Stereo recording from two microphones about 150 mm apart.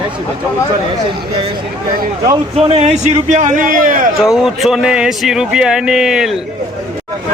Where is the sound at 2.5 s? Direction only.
45° right (ahead or behind); by 4.1 s 60° right (ahead or behind).